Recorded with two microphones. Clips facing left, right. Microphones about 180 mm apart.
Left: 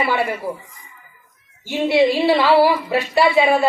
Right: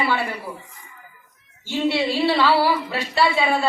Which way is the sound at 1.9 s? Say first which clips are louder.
Left 7 dB; 20° left (ahead or behind).